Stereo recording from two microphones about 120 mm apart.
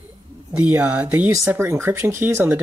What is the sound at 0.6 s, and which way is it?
Speech, 15° right (ahead or behind).